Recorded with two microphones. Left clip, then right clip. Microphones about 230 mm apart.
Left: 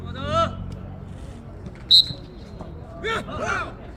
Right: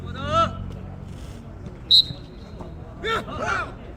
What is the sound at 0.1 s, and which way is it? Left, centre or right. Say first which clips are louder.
Vehicle: right 1 dB; centre.